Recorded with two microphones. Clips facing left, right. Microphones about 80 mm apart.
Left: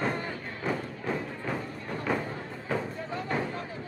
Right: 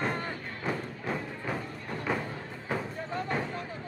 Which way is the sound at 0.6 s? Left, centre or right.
Centre.